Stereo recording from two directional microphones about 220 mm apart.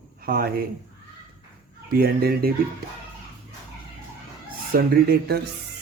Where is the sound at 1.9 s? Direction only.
45° right (ahead or behind).